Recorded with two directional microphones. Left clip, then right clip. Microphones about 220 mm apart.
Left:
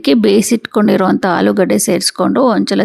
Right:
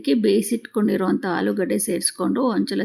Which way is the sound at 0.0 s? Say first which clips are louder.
Left 8 dB; 40° left (ahead or behind).